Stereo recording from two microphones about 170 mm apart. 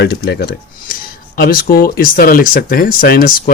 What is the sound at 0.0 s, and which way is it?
Speech, 70° left (ahead or behind).